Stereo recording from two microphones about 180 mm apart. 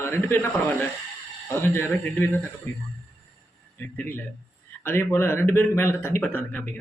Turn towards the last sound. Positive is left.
turn(degrees=10)  # may be behind; listen again after turning